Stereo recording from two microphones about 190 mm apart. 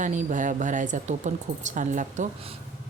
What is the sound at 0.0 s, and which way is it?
Speech, 40° right (ahead or behind).